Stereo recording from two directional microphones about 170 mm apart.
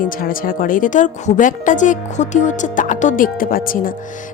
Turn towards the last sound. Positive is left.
turn(degrees=55)  # may be behind; listen again after turning